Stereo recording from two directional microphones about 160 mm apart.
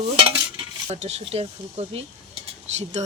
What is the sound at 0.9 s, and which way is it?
Speech, 45° right (ahead or behind).